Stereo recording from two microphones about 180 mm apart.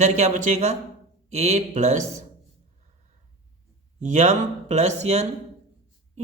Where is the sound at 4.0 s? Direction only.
40° right (ahead or behind).